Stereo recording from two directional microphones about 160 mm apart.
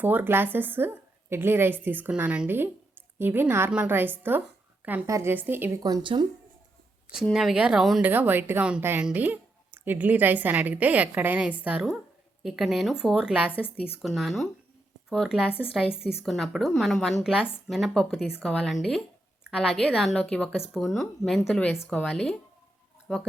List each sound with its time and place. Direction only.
0.0 s a woman's voice: 10° right (ahead or behind)
5.8 s speech: 25° right (ahead or behind)
7.2 s a woman's voice: centre (ahead or behind)